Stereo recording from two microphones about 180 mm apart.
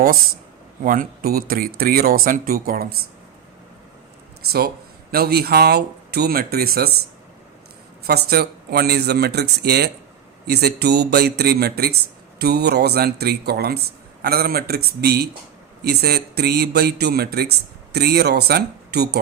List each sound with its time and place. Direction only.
0.9 s speech: 50° right (ahead or behind)
5.1 s a man's voice: 60° right (ahead or behind)
8.0 s a man's voice: 60° right (ahead or behind)